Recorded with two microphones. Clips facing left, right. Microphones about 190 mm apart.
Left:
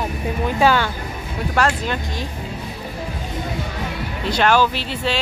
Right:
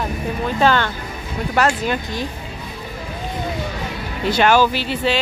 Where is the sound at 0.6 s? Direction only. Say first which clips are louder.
Even; 10° left (ahead or behind).